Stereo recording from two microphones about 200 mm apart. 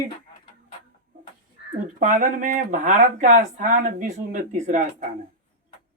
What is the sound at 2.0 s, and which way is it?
Speech, 40° right (ahead or behind).